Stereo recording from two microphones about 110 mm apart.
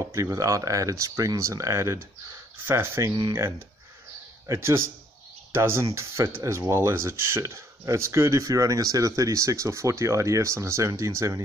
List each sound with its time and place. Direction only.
0.0 s speech: 30° right (ahead or behind)
4.5 s speech: 25° right (ahead or behind)